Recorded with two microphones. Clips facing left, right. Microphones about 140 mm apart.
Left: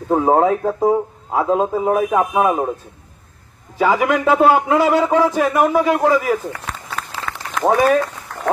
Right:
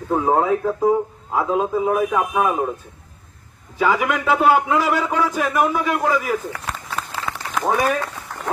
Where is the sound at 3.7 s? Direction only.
35° left (ahead or behind).